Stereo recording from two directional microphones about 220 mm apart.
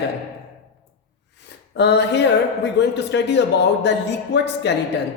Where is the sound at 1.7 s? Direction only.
50° left (ahead or behind).